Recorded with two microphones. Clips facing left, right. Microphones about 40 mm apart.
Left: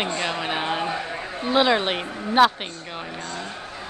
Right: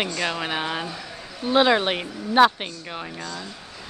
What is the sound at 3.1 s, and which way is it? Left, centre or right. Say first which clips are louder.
Speech: left 2 dB; left.